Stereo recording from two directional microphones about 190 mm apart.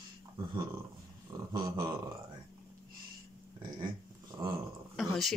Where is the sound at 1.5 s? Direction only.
20° right (ahead or behind).